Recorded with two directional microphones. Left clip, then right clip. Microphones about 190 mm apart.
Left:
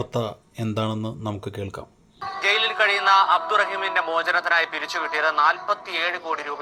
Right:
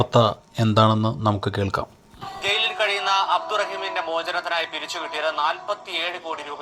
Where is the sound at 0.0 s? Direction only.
10° right (ahead or behind).